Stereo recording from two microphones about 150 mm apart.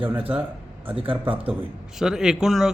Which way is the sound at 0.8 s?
35° right (ahead or behind).